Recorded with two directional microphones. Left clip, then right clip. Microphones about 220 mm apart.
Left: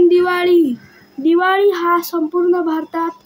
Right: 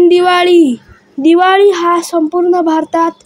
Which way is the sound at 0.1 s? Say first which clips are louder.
Right 5 dB; 30° right (ahead or behind).